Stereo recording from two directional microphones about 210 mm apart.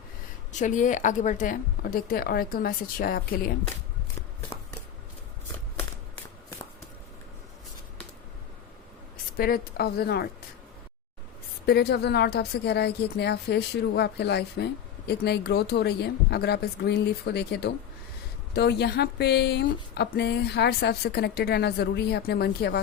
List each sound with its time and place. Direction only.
0.5 s a woman's voice: 35° left (ahead or behind)
9.4 s a woman's voice: 45° left (ahead or behind)
11.6 s a woman's voice: 50° left (ahead or behind)